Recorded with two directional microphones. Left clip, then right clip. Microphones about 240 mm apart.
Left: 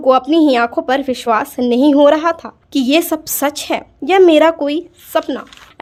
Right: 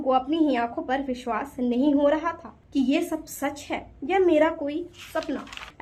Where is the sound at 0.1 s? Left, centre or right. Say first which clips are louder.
Left 12 dB; left.